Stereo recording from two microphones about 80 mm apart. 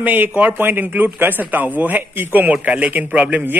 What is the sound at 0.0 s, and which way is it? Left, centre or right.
A man's voice, right.